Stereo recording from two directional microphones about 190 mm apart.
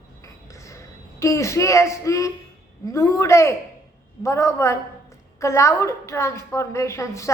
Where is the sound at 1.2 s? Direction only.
15° left (ahead or behind).